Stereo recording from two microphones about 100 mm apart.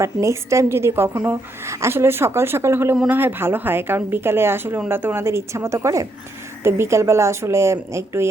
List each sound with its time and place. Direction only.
0.0 s a woman's voice: 30° right (ahead or behind)